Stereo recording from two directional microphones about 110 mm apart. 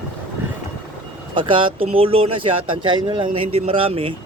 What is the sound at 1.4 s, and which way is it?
Speech, 50° right (ahead or behind).